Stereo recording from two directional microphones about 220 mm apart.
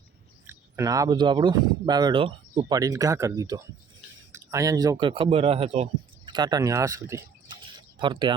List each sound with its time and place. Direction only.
0.4 s speech: 15° right (ahead or behind)